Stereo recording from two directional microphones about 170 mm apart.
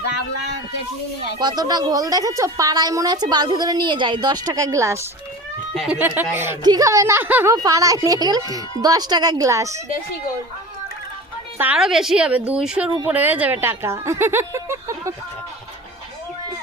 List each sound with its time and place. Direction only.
1.4 s a woman's voice: 25° right (ahead or behind)
11.5 s a woman's voice: 10° right (ahead or behind)